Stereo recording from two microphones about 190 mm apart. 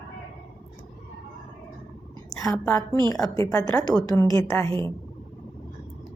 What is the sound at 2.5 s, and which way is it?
A woman's voice, 10° left (ahead or behind).